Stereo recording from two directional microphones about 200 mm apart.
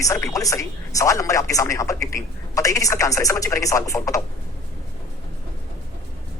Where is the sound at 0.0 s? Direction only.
15° left (ahead or behind).